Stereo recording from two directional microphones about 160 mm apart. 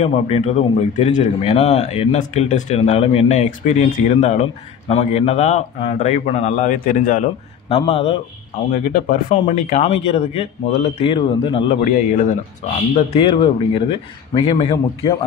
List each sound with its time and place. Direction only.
0.0 s a man's voice: 45° left (ahead or behind)
7.7 s speech: 35° left (ahead or behind)
8.7 s speech: 55° left (ahead or behind); by 11.7 s 35° left (ahead or behind)
11.8 s a man's voice: 50° left (ahead or behind)
12.9 s speech: 35° left (ahead or behind)